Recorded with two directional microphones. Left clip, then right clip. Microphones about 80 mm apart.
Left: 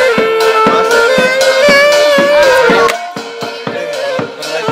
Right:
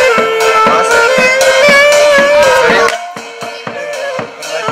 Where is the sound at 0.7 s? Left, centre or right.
Left.